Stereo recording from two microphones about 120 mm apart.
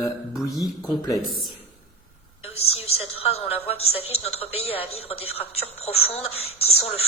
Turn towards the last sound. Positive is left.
turn(degrees=55)  # may be behind; listen again after turning